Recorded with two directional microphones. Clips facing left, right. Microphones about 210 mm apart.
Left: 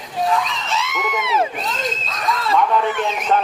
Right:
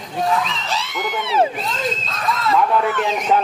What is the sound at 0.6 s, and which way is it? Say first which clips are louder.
Speech: left 1 dB; 35° right (ahead or behind).